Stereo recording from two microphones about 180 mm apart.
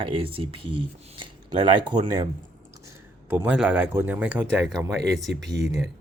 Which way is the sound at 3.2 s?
10° right (ahead or behind).